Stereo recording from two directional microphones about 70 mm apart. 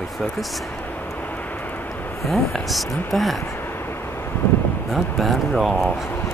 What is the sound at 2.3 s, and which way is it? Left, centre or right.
Speech, centre.